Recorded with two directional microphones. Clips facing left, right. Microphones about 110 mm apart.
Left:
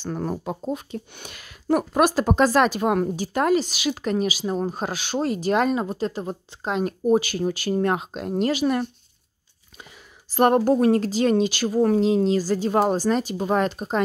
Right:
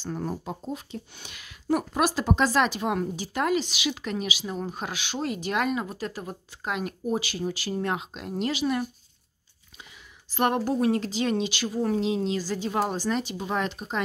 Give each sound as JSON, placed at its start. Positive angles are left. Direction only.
{"t": 0.0, "sound": "speech", "side_deg": 75}
{"t": 10.3, "sound": "speech", "side_deg": 40}